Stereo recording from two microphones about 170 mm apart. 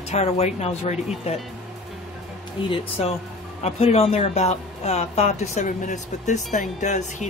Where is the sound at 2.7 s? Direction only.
35° left (ahead or behind).